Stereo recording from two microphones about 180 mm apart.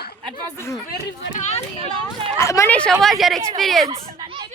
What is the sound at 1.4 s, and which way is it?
Speech, 40° left (ahead or behind).